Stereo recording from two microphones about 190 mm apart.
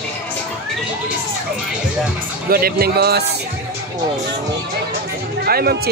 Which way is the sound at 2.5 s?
50° right (ahead or behind).